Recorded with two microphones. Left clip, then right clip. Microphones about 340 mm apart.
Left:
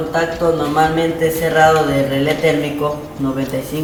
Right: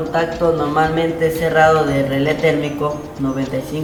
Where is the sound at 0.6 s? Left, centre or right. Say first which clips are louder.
Left 1 dB; centre.